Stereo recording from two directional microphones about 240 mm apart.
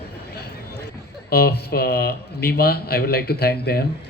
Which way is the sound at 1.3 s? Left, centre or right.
Left.